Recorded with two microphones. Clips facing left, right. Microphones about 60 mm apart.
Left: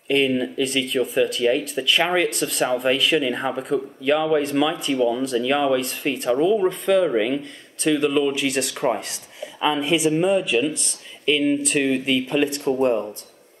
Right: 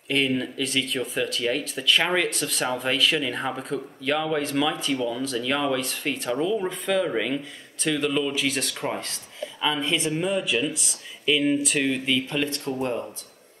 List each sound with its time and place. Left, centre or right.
0.1 s speech: centre